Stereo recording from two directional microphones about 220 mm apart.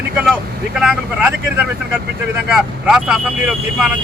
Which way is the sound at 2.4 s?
5° right (ahead or behind).